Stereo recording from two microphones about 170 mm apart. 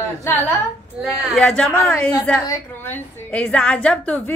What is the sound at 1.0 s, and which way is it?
Speech, centre (ahead or behind).